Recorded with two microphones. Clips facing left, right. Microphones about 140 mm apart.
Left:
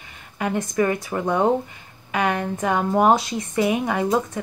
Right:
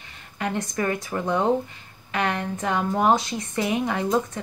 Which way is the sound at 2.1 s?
15° left (ahead or behind).